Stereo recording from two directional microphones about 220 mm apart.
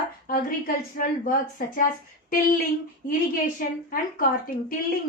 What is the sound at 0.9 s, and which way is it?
Speech, 40° left (ahead or behind).